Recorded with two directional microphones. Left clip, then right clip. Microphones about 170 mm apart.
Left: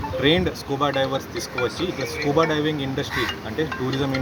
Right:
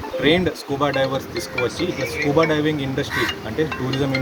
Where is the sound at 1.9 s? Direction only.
30° right (ahead or behind).